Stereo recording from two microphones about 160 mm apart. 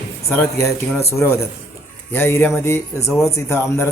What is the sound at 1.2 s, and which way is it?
A man's voice, 15° left (ahead or behind).